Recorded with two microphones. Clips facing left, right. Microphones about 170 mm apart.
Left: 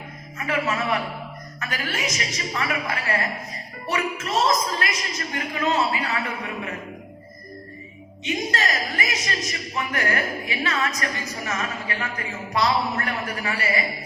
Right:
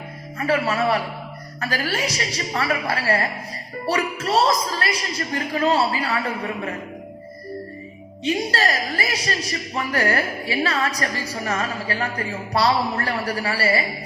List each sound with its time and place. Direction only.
0.3 s a man's voice: 35° right (ahead or behind)
8.2 s a man's voice: 35° right (ahead or behind)